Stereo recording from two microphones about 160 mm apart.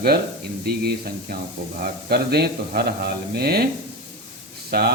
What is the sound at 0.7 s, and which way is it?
Speech, 80° right.